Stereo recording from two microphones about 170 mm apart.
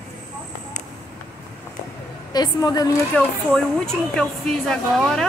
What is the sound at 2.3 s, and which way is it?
Speech, 25° left (ahead or behind).